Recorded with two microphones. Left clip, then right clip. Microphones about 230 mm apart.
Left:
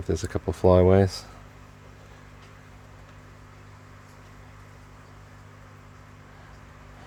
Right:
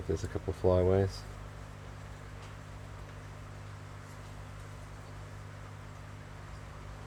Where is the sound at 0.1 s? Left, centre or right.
Left.